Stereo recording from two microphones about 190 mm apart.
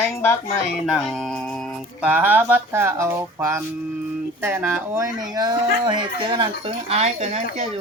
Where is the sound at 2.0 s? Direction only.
10° right (ahead or behind).